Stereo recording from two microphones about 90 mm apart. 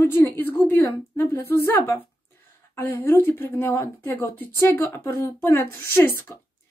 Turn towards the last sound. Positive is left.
turn(degrees=30)  # may be behind; listen again after turning